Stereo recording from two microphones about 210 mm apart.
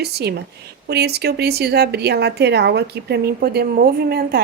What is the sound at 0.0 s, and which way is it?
A woman's voice, 50° right (ahead or behind).